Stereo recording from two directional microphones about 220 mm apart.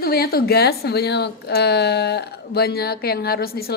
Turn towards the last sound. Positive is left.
turn(degrees=45)  # may be behind; listen again after turning